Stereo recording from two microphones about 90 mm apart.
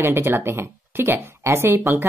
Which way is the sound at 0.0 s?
25° right (ahead or behind).